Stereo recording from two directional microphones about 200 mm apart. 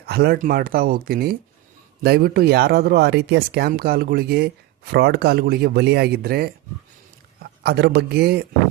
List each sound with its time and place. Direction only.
0.0 s speech: 50° right (ahead or behind)
7.6 s speech: 55° right (ahead or behind)